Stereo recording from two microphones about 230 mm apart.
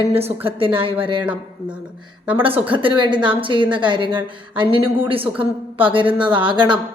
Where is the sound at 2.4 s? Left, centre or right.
Right.